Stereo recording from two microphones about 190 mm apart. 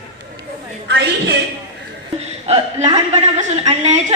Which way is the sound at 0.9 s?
65° right (ahead or behind).